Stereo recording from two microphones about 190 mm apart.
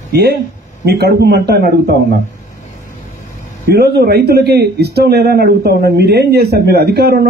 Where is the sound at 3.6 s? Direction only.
60° right (ahead or behind).